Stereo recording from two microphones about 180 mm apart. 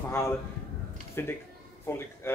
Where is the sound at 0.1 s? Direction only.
15° left (ahead or behind).